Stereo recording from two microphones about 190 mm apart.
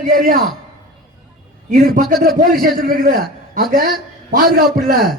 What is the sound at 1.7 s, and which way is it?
A man's voice, 50° right (ahead or behind).